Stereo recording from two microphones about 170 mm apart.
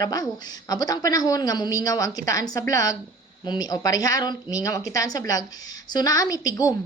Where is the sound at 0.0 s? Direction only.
20° left (ahead or behind).